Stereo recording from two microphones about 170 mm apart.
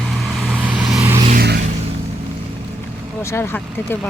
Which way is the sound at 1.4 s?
70° right (ahead or behind).